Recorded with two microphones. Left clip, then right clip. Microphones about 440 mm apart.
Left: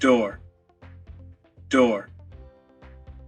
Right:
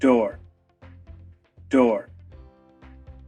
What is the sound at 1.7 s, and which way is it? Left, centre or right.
Speech, left.